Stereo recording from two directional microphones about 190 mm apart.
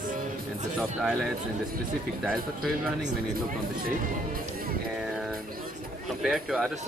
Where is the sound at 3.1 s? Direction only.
50° right (ahead or behind).